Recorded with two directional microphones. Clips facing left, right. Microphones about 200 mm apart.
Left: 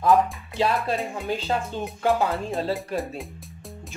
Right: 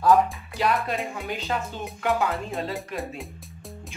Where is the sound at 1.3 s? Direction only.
30° left (ahead or behind).